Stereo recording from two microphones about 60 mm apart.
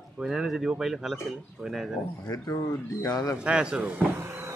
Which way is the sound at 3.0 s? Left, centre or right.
Left.